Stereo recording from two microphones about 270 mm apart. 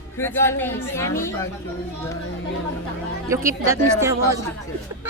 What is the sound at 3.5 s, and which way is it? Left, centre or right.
Speech, centre.